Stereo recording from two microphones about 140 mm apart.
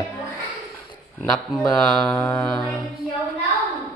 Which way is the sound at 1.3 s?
Centre (ahead or behind).